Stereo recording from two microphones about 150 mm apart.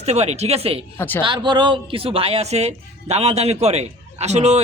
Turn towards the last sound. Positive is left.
turn(degrees=-50)  # may be behind; listen again after turning